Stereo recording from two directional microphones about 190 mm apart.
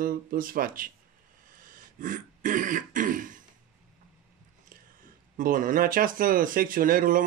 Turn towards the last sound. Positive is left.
turn(degrees=-45)  # may be behind; listen again after turning